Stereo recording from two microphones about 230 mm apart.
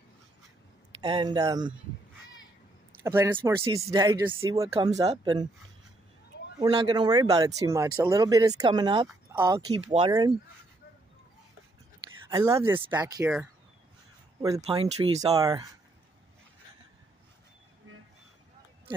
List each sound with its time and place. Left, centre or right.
1.0 s speech: right
3.0 s speech: centre
6.6 s speech: centre
12.3 s speech: centre
14.4 s speech: centre
15.3 s speech: centre